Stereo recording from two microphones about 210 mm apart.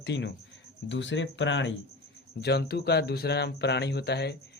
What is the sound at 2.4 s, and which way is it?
Speech, 50° left (ahead or behind).